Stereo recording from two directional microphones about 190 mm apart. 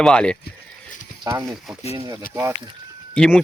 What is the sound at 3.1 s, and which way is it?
Speech, 5° left (ahead or behind).